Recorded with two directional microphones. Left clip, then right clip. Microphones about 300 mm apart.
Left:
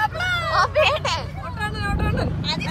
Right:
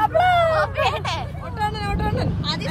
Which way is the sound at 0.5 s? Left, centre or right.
Centre.